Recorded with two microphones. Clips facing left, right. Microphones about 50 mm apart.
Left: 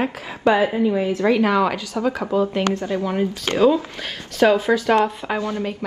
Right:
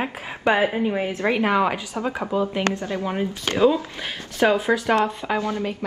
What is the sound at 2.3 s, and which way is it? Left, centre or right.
Speech, centre.